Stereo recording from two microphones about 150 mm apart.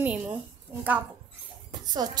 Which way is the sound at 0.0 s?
10° right (ahead or behind).